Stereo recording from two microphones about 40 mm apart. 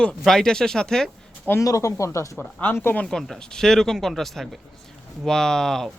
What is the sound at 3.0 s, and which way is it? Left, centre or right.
Speech, centre.